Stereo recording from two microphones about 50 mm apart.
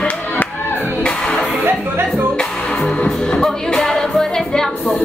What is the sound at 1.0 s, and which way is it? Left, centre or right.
Music, centre.